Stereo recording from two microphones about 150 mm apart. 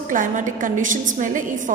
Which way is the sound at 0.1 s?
60° right (ahead or behind).